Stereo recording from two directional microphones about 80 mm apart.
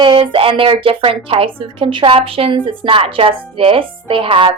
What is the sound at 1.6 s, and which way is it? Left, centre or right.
A woman's voice, right.